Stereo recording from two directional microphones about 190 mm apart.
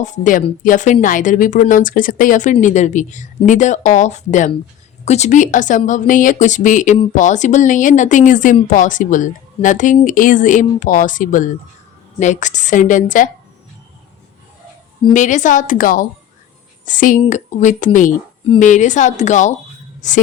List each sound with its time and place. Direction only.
0.0 s speech: 40° left (ahead or behind)
15.1 s a woman's voice: 40° left (ahead or behind)